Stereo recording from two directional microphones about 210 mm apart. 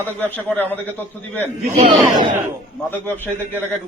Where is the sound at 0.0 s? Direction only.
10° left (ahead or behind).